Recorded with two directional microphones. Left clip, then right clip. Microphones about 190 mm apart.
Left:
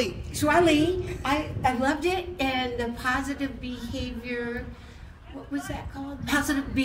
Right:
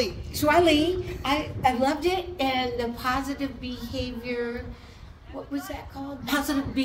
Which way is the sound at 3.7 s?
25° left (ahead or behind).